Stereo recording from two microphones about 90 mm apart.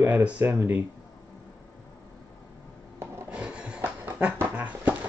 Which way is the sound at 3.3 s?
10° right (ahead or behind).